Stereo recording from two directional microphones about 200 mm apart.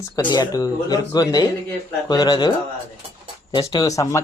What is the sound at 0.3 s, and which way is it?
Speech, 20° left (ahead or behind).